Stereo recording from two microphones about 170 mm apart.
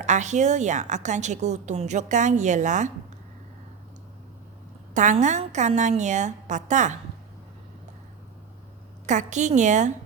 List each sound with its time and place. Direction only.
0.0 s a woman's voice: 45° right (ahead or behind)
4.9 s a woman's voice: 45° right (ahead or behind)
9.0 s a woman's voice: 45° right (ahead or behind)